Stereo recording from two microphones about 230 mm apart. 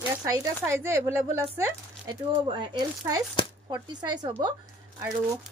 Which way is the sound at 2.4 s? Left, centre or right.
Centre.